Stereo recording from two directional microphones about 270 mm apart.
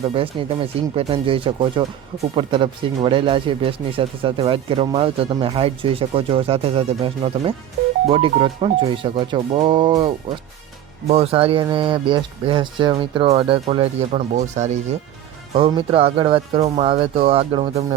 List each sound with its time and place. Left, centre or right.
0.1 s speech: right
11.1 s speech: right